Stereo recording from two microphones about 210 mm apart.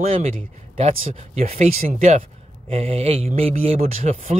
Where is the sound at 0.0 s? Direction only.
30° right (ahead or behind).